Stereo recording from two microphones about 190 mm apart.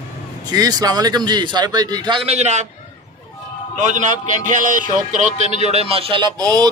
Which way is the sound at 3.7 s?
40° right (ahead or behind).